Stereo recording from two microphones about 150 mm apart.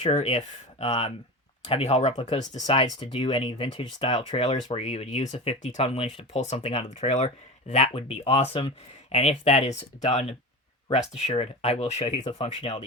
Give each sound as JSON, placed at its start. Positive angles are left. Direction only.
{"t": 0.0, "sound": "speech", "side_deg": 45}
{"t": 2.6, "sound": "speech", "side_deg": 40}